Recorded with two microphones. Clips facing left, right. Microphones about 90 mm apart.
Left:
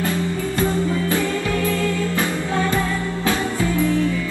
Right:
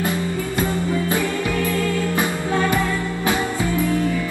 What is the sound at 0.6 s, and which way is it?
Music, 20° right (ahead or behind).